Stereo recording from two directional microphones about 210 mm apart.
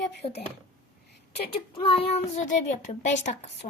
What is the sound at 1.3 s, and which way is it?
A child's voice, 25° left (ahead or behind).